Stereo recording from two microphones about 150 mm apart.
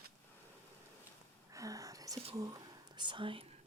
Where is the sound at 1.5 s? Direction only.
20° right (ahead or behind).